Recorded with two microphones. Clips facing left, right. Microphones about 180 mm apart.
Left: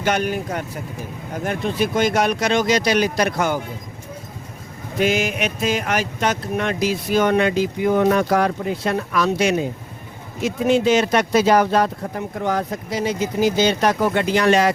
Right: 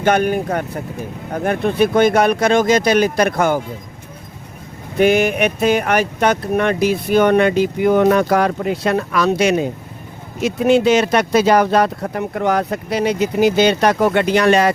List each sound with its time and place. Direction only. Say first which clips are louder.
0.0 s speech: right 5 dB; 55° right (ahead or behind)
4.9 s speech: right 6 dB; 60° right (ahead or behind)